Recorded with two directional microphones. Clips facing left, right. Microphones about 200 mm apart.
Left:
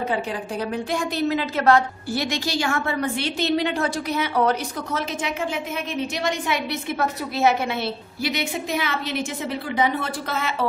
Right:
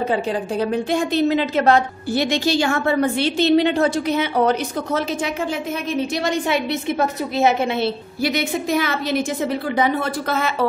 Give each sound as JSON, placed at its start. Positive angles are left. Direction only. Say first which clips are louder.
{"t": 0.1, "sound": "a woman's voice", "louder": "right 5 dB", "side_deg": -30}
{"t": 6.1, "sound": "a woman's voice", "louder": "right 4 dB", "side_deg": -30}
{"t": 8.2, "sound": "a woman's voice", "louder": "right 5 dB", "side_deg": -45}